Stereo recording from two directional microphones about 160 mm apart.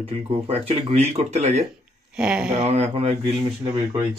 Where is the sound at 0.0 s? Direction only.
40° right (ahead or behind).